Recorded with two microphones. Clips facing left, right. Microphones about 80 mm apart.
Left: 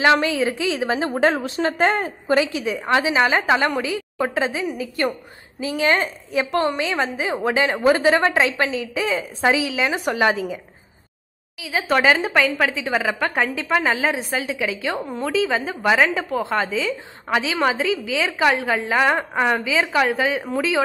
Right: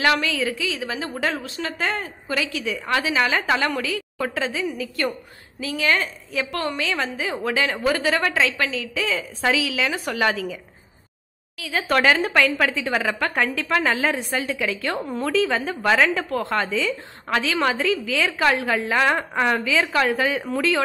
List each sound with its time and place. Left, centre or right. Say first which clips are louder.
0.0 s a woman's voice: left 4 dB; left
11.5 s speech: left 1 dB; centre